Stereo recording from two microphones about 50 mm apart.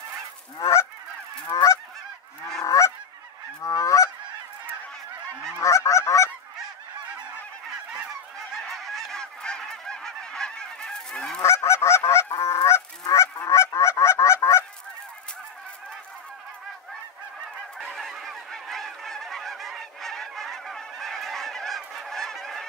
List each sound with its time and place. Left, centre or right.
1.5 s goose: left
5.6 s goose: left
8.5 s goose: centre
9.2 s goose: centre
11.4 s goose: left
17.9 s goose: centre